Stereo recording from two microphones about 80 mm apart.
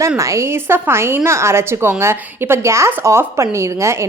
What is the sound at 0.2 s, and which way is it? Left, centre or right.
A woman's voice, right.